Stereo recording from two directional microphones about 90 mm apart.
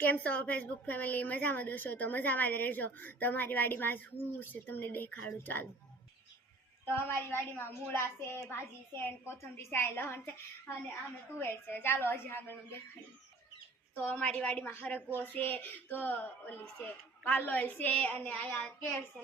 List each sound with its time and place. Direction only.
0.0 s a woman's voice: 20° left (ahead or behind)
6.8 s a woman's voice: 25° left (ahead or behind)
11.3 s a woman's voice: 25° left (ahead or behind)
13.9 s a woman's voice: 20° left (ahead or behind)